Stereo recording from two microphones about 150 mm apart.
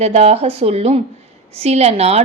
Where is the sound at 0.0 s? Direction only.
45° right (ahead or behind).